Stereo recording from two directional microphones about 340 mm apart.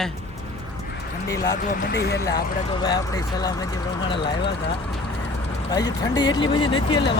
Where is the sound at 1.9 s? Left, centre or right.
Left.